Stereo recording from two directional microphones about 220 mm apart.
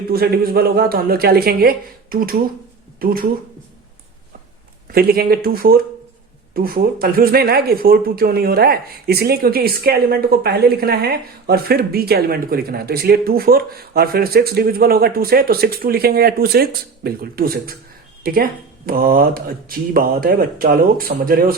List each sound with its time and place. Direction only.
0.1 s speech: 45° right (ahead or behind)
4.9 s speech: 45° right (ahead or behind)